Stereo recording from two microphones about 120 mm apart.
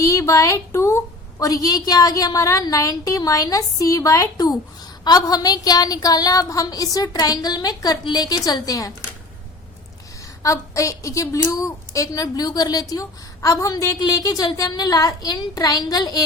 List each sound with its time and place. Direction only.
0.0 s a woman's voice: 25° left (ahead or behind)
10.4 s a woman's voice: 25° left (ahead or behind)